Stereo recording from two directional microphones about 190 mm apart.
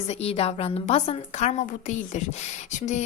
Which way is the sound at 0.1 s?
30° left (ahead or behind).